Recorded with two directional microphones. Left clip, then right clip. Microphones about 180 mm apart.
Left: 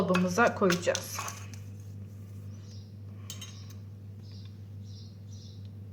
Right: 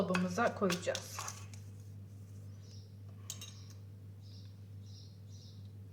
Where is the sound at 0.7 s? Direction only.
5° right (ahead or behind).